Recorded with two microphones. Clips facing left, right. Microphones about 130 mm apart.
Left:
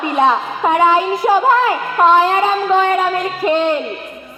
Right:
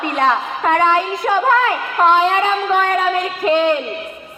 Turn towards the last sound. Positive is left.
turn(degrees=5)  # may be behind; listen again after turning